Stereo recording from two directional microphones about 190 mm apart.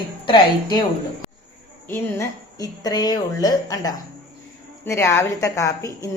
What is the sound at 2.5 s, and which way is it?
A woman's voice, 20° left (ahead or behind).